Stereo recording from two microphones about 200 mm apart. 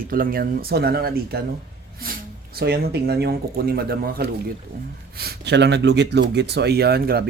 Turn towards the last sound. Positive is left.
turn(degrees=-50)  # may be behind; listen again after turning